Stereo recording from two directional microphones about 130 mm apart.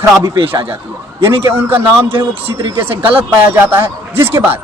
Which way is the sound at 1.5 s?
15° right (ahead or behind).